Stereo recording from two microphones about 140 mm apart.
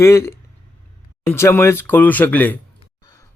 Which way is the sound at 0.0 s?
20° left (ahead or behind).